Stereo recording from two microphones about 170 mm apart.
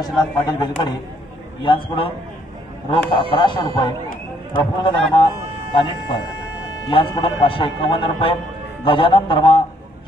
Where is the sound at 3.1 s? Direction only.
30° left (ahead or behind).